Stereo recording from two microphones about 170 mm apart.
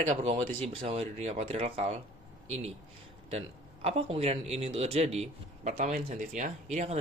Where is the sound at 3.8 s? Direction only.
35° right (ahead or behind).